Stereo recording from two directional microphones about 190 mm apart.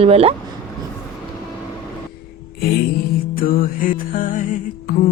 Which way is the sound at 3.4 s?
50° left (ahead or behind).